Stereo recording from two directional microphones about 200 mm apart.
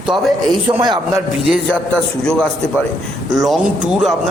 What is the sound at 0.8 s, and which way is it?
Speech, 20° right (ahead or behind).